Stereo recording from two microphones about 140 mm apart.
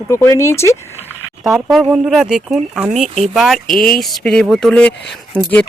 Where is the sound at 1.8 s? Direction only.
10° right (ahead or behind); by 5.5 s 10° left (ahead or behind).